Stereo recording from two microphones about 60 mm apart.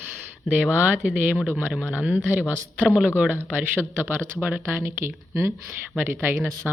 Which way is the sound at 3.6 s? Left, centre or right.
Right.